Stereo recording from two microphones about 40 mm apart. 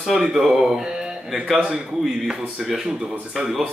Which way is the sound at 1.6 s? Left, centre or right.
Right.